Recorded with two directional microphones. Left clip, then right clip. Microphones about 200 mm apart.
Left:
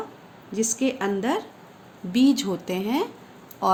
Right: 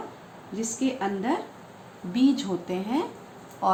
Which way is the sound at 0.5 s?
55° left (ahead or behind).